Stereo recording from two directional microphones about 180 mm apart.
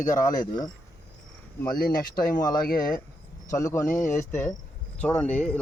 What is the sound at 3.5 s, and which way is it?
Speech, 15° left (ahead or behind).